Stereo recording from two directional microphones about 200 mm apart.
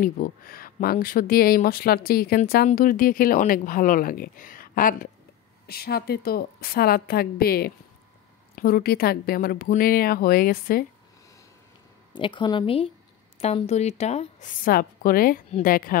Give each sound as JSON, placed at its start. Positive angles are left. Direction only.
{"t": 0.0, "sound": "speech", "side_deg": 45}
{"t": 12.2, "sound": "a woman's voice", "side_deg": 25}